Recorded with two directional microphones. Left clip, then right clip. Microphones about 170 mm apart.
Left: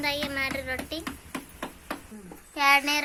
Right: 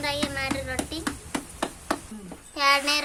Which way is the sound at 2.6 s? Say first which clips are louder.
Even; 10° left (ahead or behind).